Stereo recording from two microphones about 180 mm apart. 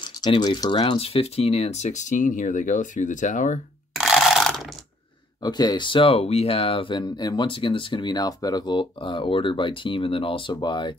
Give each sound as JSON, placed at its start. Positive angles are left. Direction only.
{"t": 0.2, "sound": "speech", "side_deg": 25}
{"t": 3.9, "sound": "ratchet", "side_deg": 0}
{"t": 5.4, "sound": "speech", "side_deg": 20}